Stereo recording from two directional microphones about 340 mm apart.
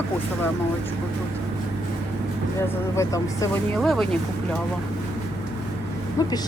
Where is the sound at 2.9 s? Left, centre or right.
Centre.